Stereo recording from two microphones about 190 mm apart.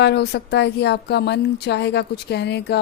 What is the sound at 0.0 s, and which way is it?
Speech, 60° left (ahead or behind).